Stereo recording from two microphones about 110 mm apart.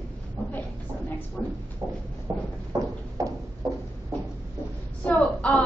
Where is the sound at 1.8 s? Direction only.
40° right (ahead or behind).